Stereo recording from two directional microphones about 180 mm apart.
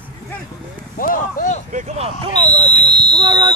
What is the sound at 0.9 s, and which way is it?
Speech, 50° left (ahead or behind).